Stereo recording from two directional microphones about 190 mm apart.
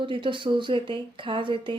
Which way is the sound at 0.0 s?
25° right (ahead or behind).